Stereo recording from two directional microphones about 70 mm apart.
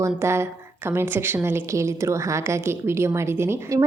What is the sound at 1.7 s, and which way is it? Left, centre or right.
A woman's voice, right.